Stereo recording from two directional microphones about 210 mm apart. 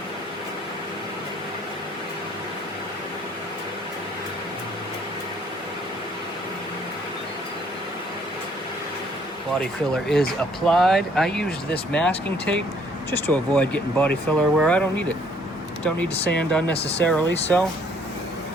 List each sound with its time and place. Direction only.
9.9 s speech: centre (ahead or behind)
16.3 s speech: 5° left (ahead or behind)
16.7 s speech: 30° left (ahead or behind)
17.0 s speech: 5° left (ahead or behind)